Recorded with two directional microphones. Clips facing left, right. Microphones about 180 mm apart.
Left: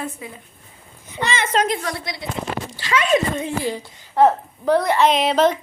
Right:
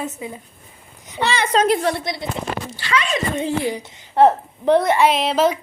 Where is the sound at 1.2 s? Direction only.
10° right (ahead or behind).